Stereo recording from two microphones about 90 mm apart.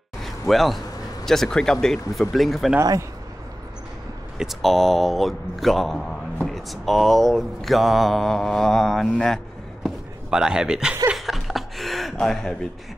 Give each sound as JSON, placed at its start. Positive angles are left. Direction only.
{"t": 0.2, "sound": "a sound", "side_deg": 0}
{"t": 1.2, "sound": "mantra", "side_deg": 5}
{"t": 2.8, "sound": "speech", "side_deg": -40}
{"t": 4.4, "sound": "mantra", "side_deg": 0}
{"t": 9.8, "sound": "a sound", "side_deg": -10}
{"t": 11.1, "sound": "chuckle", "side_deg": 0}